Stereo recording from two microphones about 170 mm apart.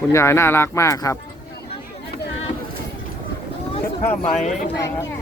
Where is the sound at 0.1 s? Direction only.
15° left (ahead or behind).